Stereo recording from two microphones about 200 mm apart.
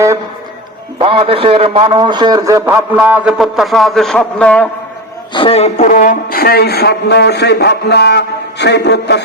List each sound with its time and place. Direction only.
0.9 s a man's voice: 25° right (ahead or behind); by 4.7 s 5° left (ahead or behind)
5.3 s a man's voice: 25° left (ahead or behind); by 9.2 s 60° left (ahead or behind)